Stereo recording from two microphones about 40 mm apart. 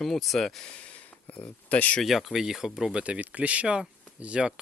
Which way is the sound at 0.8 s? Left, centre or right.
Left.